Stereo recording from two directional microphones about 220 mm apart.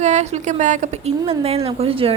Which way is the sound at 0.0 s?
30° right (ahead or behind).